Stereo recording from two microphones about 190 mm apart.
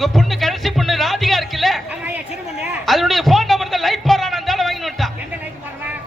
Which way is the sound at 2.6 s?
Centre (ahead or behind).